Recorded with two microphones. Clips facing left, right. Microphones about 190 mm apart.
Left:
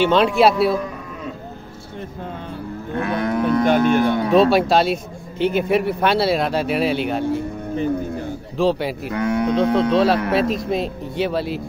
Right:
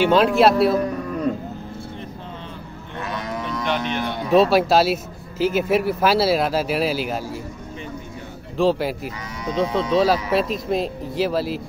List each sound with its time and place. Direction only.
0.0 s speech: 5° right (ahead or behind)
2.9 s moo: 55° left (ahead or behind)
4.3 s speech: centre (ahead or behind)
8.5 s speech: centre (ahead or behind)
9.1 s speech: 60° left (ahead or behind)
9.8 s speech: centre (ahead or behind)